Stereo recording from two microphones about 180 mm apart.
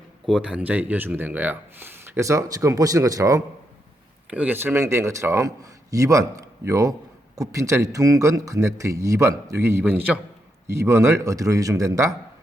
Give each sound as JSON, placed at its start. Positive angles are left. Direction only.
{"t": 0.3, "sound": "speech", "side_deg": -5}